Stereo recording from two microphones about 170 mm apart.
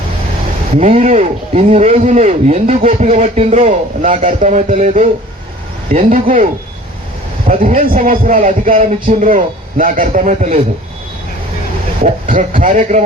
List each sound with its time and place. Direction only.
0.8 s a man's voice: 40° right (ahead or behind)
7.4 s speech: 50° right (ahead or behind)
12.0 s speech: 50° right (ahead or behind)